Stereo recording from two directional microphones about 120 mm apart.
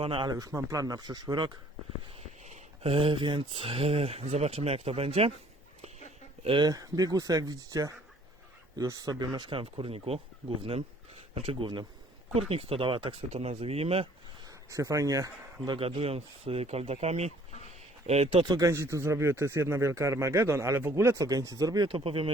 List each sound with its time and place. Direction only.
0.0 s speech: 50° right (ahead or behind)
0.3 s speech: 30° right (ahead or behind)
2.4 s a sound: 70° right (ahead or behind)
2.9 s speech: 50° right (ahead or behind)
6.4 s speech: 45° right (ahead or behind)
6.7 s speech: 30° right (ahead or behind); by 10.0 s 50° right (ahead or behind)
11.6 s speech: 40° right (ahead or behind)
12.3 s speech: 55° right (ahead or behind)
13.3 s speech: 60° right (ahead or behind)
14.4 s speech: 25° right (ahead or behind)
15.6 s speech: 45° right (ahead or behind)
18.4 s speech: 35° right (ahead or behind)
18.7 s speech: 25° right (ahead or behind)
21.8 s speech: 50° right (ahead or behind)